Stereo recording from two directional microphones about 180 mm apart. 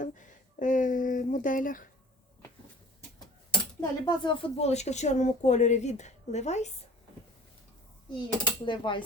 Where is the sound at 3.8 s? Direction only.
25° left (ahead or behind).